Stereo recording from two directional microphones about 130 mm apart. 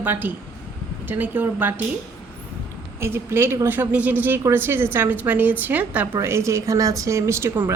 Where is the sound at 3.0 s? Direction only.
20° right (ahead or behind).